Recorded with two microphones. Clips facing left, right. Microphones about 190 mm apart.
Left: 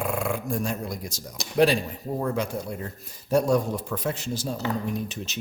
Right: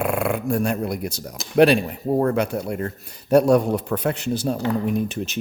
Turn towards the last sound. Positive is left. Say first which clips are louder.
# right 7 dB
turn(degrees=-60)  # may be behind; listen again after turning